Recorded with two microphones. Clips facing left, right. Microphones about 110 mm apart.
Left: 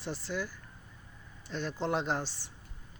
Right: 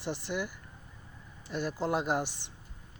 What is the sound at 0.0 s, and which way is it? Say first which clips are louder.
Speech: right 2 dB; 15° right (ahead or behind).